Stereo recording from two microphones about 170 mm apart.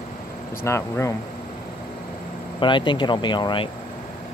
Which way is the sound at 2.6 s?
30° left (ahead or behind).